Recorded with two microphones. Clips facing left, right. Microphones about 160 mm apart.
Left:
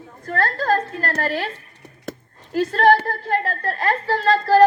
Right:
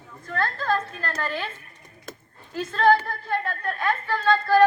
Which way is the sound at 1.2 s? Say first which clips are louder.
Left 5 dB; 40° left (ahead or behind).